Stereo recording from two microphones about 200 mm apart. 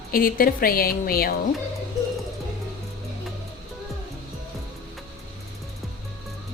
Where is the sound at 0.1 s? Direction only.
45° left (ahead or behind).